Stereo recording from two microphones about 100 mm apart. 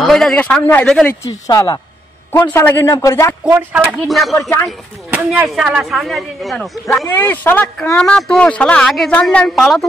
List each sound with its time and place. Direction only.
0.0 s a sound: 5° left (ahead or behind)
0.4 s speech: 20° left (ahead or behind)
1.2 s a man's voice: 40° left (ahead or behind)
2.5 s a man's voice: 30° left (ahead or behind)
3.4 s speech: 20° right (ahead or behind)
4.1 s speech: centre (ahead or behind)
4.4 s speech: 25° left (ahead or behind)
5.1 s speech: 15° right (ahead or behind)
7.2 s speech: 20° left (ahead or behind); by 9.8 s 5° left (ahead or behind)